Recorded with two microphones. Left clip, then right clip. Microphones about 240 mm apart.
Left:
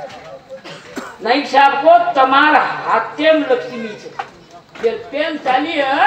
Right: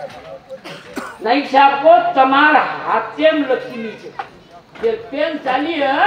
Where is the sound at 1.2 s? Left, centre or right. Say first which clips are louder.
Even; left.